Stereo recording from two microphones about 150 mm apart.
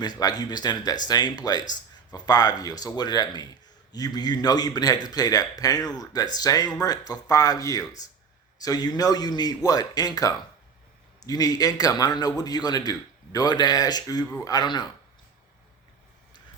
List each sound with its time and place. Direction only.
0.0 s a man's voice: 25° left (ahead or behind)